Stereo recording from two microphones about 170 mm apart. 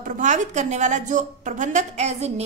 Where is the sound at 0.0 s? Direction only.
45° right (ahead or behind).